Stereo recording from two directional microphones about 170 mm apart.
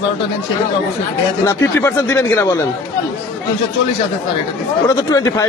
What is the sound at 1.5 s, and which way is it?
Speech, 15° left (ahead or behind).